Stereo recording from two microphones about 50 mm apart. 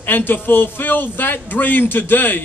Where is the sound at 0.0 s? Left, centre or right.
Left.